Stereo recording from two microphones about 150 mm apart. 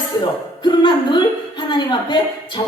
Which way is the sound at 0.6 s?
30° left (ahead or behind).